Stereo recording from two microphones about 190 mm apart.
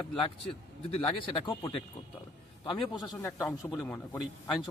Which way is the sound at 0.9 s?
30° left (ahead or behind).